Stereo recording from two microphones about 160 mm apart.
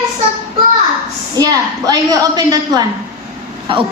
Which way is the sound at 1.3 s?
25° right (ahead or behind).